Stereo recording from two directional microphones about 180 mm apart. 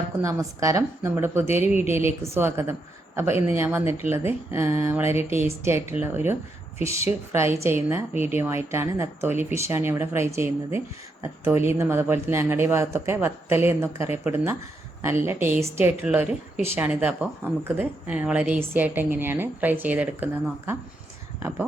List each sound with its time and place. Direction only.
0.2 s speech: 15° right (ahead or behind)